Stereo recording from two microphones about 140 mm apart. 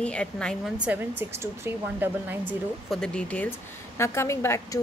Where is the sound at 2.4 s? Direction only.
5° left (ahead or behind).